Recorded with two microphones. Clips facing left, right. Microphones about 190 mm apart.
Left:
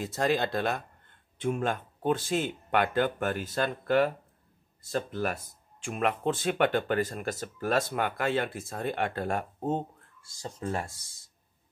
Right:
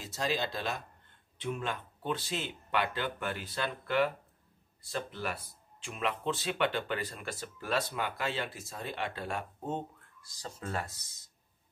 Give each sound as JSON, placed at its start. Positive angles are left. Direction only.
{"t": 0.0, "sound": "speech", "side_deg": 55}
{"t": 10.2, "sound": "speech", "side_deg": 25}